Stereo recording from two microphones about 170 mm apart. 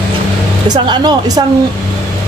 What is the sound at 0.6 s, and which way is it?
Speech, 25° right (ahead or behind).